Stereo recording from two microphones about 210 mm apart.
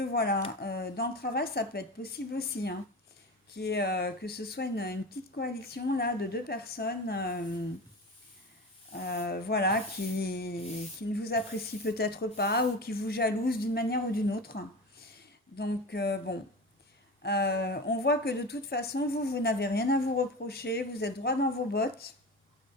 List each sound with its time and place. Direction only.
0.0 s a woman's voice: 50° left (ahead or behind)
8.9 s a woman's voice: 50° left (ahead or behind)